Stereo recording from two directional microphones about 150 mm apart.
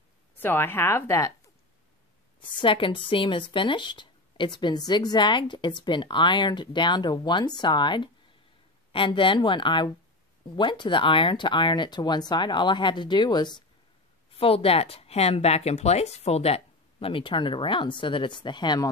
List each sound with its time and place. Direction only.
0.4 s a woman's voice: 15° left (ahead or behind)
2.6 s a woman's voice: 35° left (ahead or behind)
14.4 s a woman's voice: 40° left (ahead or behind)